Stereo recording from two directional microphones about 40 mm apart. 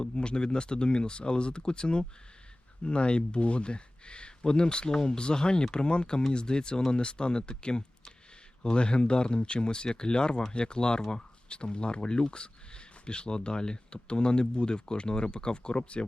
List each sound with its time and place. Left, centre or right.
0.0 s speech: left